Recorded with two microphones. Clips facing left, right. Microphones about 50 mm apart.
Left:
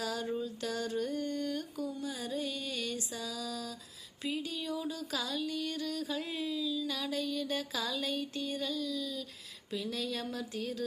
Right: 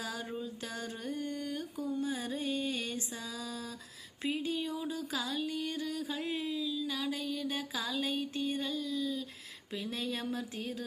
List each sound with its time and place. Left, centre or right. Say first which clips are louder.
0.0 s music: left 4 dB; centre
2.0 s music: right 2 dB; right
6.7 s a sound: left 1 dB; centre
9.7 s music: left 1 dB; right